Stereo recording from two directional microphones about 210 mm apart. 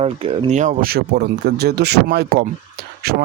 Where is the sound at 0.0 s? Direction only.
25° right (ahead or behind).